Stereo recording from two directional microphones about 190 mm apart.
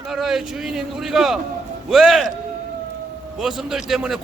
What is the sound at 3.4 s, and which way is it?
Speech, centre (ahead or behind).